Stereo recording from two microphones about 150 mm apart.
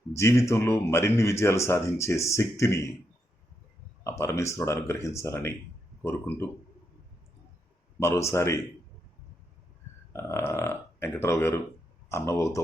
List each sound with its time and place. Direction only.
0.1 s speech: 20° left (ahead or behind)
4.0 s speech: 20° left (ahead or behind)
7.9 s speech: 20° left (ahead or behind)
10.1 s speech: 20° left (ahead or behind)